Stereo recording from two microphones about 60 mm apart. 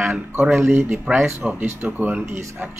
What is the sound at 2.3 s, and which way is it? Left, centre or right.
Speech, right.